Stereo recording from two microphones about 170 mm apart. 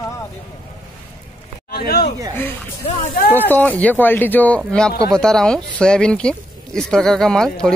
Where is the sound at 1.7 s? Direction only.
65° left (ahead or behind).